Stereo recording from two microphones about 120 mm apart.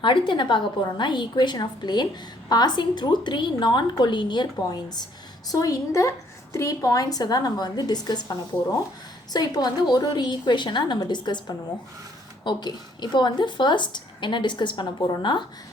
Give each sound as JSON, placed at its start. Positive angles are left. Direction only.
{"t": 0.0, "sound": "a woman's voice", "side_deg": 45}